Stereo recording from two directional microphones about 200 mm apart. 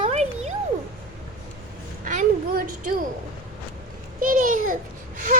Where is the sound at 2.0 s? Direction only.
45° right (ahead or behind).